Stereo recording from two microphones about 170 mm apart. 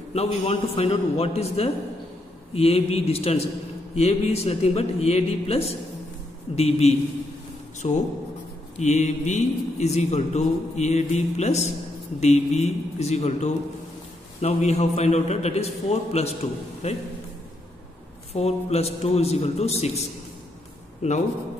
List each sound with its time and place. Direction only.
0.1 s speech: 35° left (ahead or behind)
18.3 s speech: 35° left (ahead or behind)